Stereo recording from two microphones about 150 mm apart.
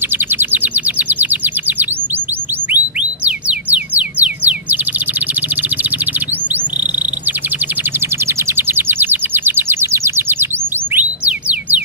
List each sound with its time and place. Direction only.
0.1 s bird: 15° right (ahead or behind)
2.7 s music: 10° right (ahead or behind)
5.6 s chirp: 10° right (ahead or behind)
8.3 s a sound: 15° right (ahead or behind)